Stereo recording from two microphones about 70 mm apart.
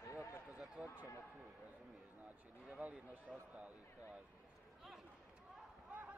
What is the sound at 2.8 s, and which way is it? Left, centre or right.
Speech, centre.